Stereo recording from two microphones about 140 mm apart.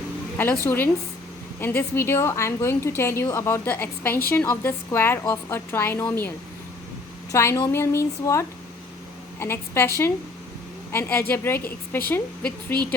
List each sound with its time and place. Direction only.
0.3 s a woman's voice: 15° left (ahead or behind)
7.3 s a woman's voice: 20° left (ahead or behind)